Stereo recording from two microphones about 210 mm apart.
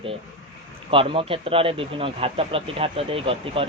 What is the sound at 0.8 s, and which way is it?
Speech, 25° right (ahead or behind).